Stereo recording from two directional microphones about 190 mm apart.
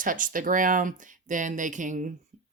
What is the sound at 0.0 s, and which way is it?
Speech, 45° right (ahead or behind).